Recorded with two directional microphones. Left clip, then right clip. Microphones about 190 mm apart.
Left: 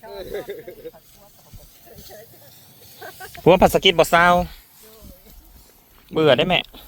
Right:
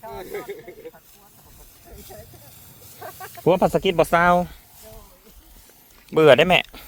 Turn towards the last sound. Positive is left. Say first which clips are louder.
# right 3 dB
turn(degrees=-35)  # may be behind; listen again after turning